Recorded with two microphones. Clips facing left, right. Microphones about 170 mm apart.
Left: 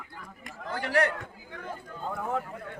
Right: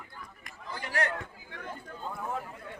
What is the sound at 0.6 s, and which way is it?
Chatter, 70° left (ahead or behind).